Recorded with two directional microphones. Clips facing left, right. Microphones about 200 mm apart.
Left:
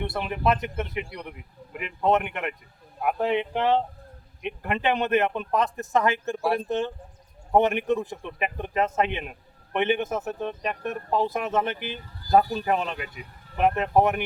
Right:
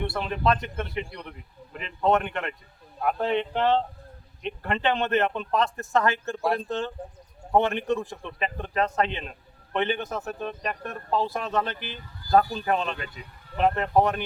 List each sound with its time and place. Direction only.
0.0 s speech: 15° left (ahead or behind)